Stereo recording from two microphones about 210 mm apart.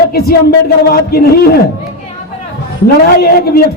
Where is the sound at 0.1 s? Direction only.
45° left (ahead or behind).